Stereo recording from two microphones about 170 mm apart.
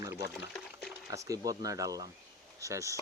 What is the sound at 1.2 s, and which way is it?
Speech, 20° right (ahead or behind).